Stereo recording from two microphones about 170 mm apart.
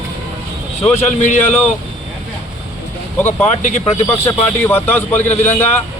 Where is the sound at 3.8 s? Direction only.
15° left (ahead or behind).